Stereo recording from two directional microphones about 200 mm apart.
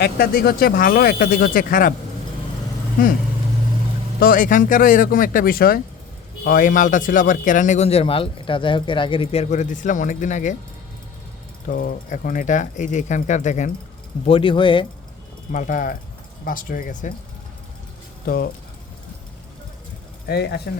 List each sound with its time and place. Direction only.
0.0 s speech: 50° left (ahead or behind)
4.2 s a man's voice: 45° left (ahead or behind)
11.7 s a man's voice: 45° left (ahead or behind)
14.3 s speech: 25° left (ahead or behind)
15.5 s a man's voice: 40° left (ahead or behind)
20.2 s speech: 55° left (ahead or behind)